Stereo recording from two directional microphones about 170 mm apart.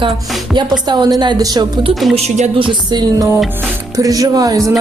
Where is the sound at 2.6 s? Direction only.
25° right (ahead or behind).